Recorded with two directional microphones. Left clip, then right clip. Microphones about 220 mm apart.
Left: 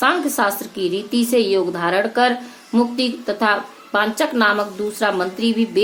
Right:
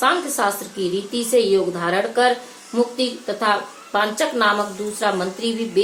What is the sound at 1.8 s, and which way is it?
A woman's voice, 50° left (ahead or behind).